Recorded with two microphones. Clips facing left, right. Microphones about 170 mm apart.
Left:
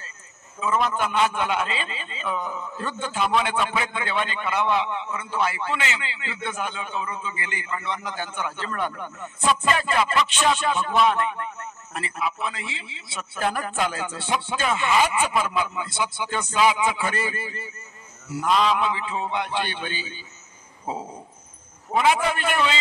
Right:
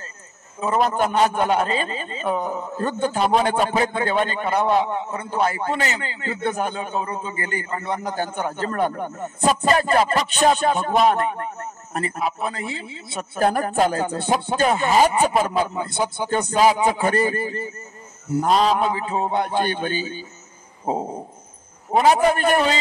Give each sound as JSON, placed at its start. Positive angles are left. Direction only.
{"t": 0.6, "sound": "a man's voice", "side_deg": -40}